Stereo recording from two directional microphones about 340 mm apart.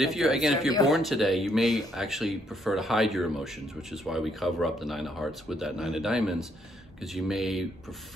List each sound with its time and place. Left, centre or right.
0.0 s speech: centre